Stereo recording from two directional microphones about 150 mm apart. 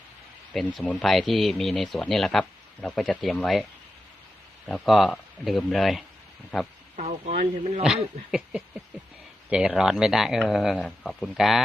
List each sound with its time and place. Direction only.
0.5 s speech: centre (ahead or behind)
6.9 s speech: 55° right (ahead or behind)
9.5 s speech: 5° right (ahead or behind)